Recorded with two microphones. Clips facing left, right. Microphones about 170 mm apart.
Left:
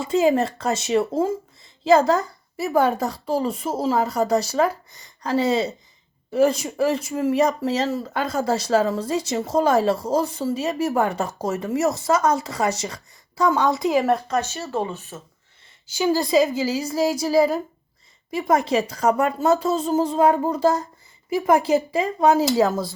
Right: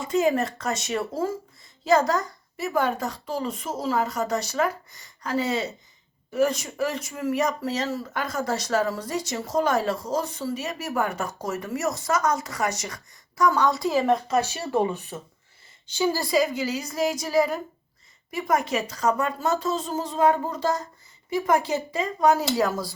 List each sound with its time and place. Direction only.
0.1 s a woman's voice: 30° left (ahead or behind)
2.6 s a woman's voice: 35° left (ahead or behind); by 14.0 s 20° left (ahead or behind)
14.3 s speech: 10° right (ahead or behind)
15.9 s a woman's voice: 15° left (ahead or behind)